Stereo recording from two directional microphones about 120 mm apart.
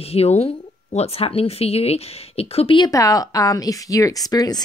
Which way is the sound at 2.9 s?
30° left (ahead or behind).